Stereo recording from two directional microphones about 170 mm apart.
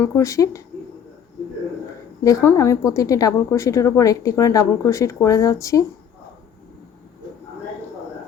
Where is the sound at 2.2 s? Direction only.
15° left (ahead or behind).